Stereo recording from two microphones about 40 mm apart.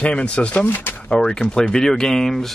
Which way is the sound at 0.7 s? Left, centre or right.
Left.